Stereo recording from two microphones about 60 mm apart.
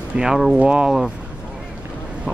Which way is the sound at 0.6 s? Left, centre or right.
Centre.